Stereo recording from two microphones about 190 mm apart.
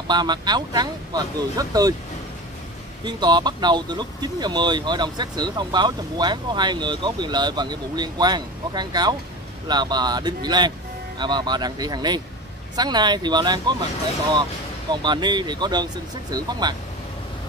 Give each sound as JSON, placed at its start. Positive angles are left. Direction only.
{"t": 0.1, "sound": "speech", "side_deg": -20}
{"t": 3.0, "sound": "speech", "side_deg": -20}
{"t": 14.9, "sound": "speech", "side_deg": -25}